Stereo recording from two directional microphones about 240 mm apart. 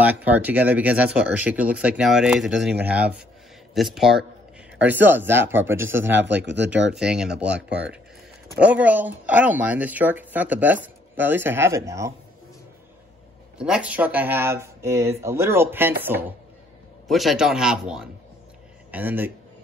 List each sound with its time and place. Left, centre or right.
0.0 s speech: centre
6.0 s speech: right
7.0 s speech: centre
13.6 s speech: centre